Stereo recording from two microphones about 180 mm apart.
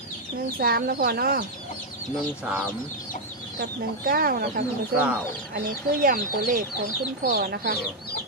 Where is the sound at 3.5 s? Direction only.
55° right (ahead or behind).